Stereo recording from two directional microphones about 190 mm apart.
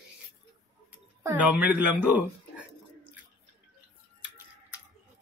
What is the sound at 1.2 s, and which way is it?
Speech, 10° right (ahead or behind).